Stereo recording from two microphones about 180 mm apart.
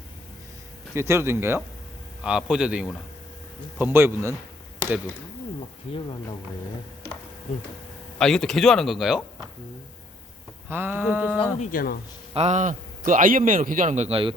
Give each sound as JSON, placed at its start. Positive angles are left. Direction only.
{"t": 0.9, "sound": "speech", "side_deg": -15}
{"t": 8.2, "sound": "speech", "side_deg": 5}
{"t": 10.7, "sound": "speech", "side_deg": -10}
{"t": 11.6, "sound": "speech", "side_deg": 50}
{"t": 12.3, "sound": "a man's voice", "side_deg": -40}